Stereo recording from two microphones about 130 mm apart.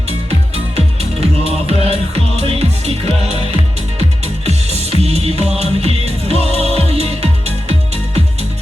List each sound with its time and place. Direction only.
1.5 s music: 50° right (ahead or behind)
4.9 s music: 55° right (ahead or behind)